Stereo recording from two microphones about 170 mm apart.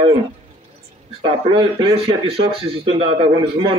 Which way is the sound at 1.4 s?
30° right (ahead or behind).